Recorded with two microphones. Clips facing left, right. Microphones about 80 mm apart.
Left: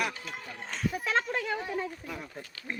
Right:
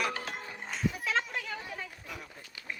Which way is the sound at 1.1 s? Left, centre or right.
Left.